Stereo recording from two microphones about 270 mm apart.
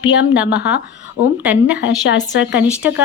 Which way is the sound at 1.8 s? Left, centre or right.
Left.